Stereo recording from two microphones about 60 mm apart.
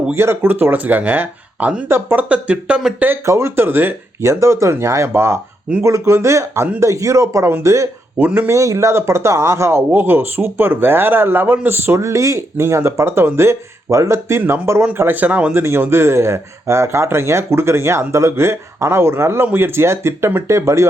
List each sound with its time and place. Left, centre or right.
0.1 s speech: right
0.4 s speech: right
1.9 s speech: right
2.3 s speech: right
3.2 s speech: right
4.2 s speech: right
8.2 s speech: right
8.4 s speech: right
9.9 s speech: right
11.9 s speech: right
14.9 s speech: right
15.5 s speech: right